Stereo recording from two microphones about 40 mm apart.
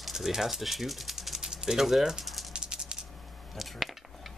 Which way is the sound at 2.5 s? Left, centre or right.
Right.